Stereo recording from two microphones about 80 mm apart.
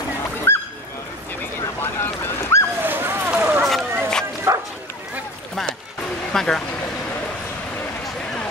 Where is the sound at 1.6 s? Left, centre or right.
Left.